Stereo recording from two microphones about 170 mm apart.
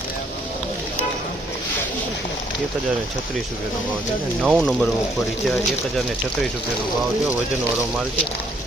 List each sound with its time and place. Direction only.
4.4 s speech: centre (ahead or behind)